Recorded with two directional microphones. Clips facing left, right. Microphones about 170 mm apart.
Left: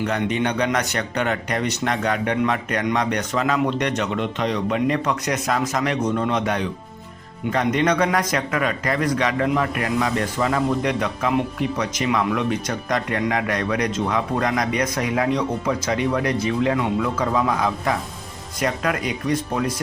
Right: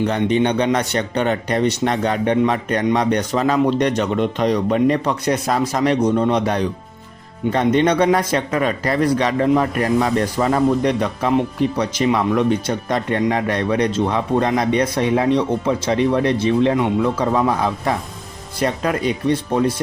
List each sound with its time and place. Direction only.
0.0 s a man's voice: 30° right (ahead or behind)